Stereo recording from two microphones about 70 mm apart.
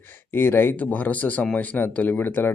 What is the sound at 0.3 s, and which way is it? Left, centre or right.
Speech, left.